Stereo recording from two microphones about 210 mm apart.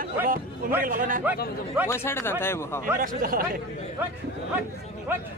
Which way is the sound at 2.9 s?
40° right (ahead or behind).